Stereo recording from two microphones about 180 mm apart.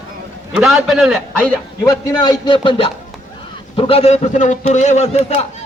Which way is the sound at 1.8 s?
20° left (ahead or behind).